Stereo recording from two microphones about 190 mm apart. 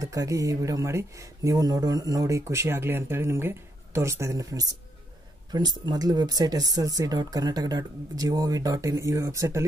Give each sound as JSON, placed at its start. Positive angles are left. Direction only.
{"t": 0.0, "sound": "speech", "side_deg": -15}